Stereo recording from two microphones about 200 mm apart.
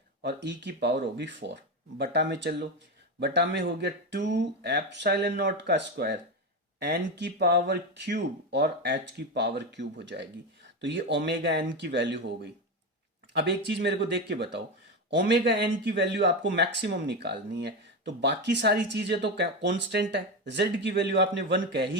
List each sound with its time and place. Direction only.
0.2 s speech: 60° right (ahead or behind)
13.3 s speech: 60° right (ahead or behind)